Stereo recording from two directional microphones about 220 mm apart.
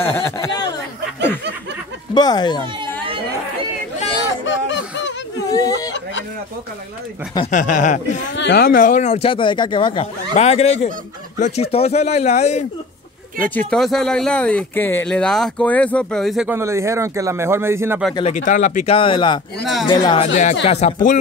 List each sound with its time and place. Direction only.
0.0 s speech: 10° left (ahead or behind)
2.1 s speech: 20° left (ahead or behind)
4.5 s snicker: 55° left (ahead or behind)
5.5 s speech: 15° left (ahead or behind)
7.5 s speech: 35° left (ahead or behind)
8.4 s speech: 50° left (ahead or behind); by 12.6 s 30° left (ahead or behind)
13.6 s speech: 5° left (ahead or behind)
18.4 s speech: 35° left (ahead or behind)
18.9 s speech: 20° left (ahead or behind)
19.6 s speech: centre (ahead or behind)
20.0 s speech: 20° left (ahead or behind)